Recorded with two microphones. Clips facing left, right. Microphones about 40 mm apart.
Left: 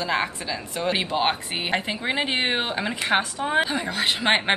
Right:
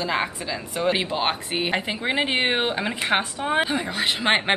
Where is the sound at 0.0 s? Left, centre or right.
Centre.